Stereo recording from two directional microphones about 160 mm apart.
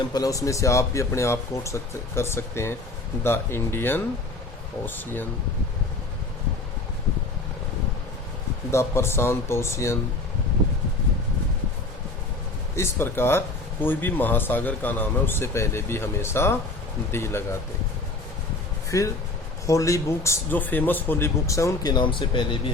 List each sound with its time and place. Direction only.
0.1 s a man's voice: 20° left (ahead or behind)
8.7 s speech: 15° left (ahead or behind)
12.7 s speech: 15° left (ahead or behind)
18.9 s a man's voice: 20° left (ahead or behind)